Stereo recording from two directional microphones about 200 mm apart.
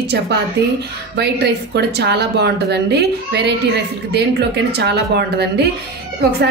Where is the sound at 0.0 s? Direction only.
55° right (ahead or behind).